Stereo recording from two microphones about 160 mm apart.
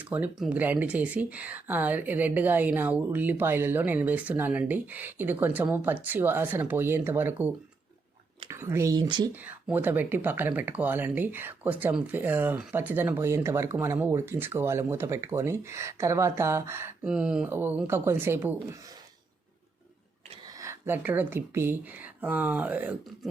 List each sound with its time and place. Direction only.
0.0 s speech: 10° right (ahead or behind); by 9.3 s 25° right (ahead or behind)
9.3 s speech: 10° right (ahead or behind)
20.6 s speech: 15° right (ahead or behind)